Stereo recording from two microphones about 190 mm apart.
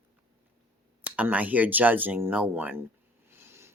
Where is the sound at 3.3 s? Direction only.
15° right (ahead or behind).